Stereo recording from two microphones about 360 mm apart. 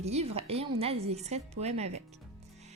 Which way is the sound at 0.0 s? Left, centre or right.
Centre.